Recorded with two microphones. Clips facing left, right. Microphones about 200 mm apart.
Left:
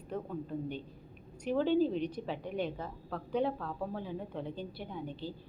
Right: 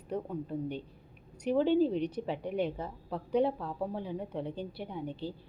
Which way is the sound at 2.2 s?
10° right (ahead or behind).